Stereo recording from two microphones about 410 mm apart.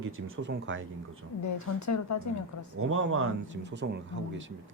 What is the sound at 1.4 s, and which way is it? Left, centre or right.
A woman's voice, left.